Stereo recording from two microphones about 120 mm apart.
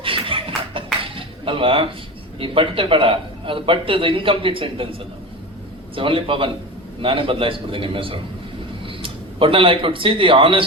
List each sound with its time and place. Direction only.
0.0 s a sound: 45° right (ahead or behind)
2.4 s a man's voice: 45° right (ahead or behind)
6.0 s a man's voice: 45° right (ahead or behind)